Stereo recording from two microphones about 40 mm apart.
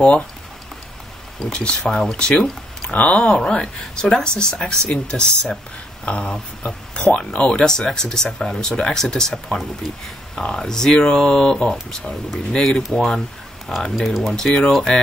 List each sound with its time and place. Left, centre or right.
1.4 s speech: centre
2.9 s speech: left
3.3 s speech: centre
7.6 s speech: centre
11.7 s speech: centre
13.9 s speech: centre
14.3 s speech: centre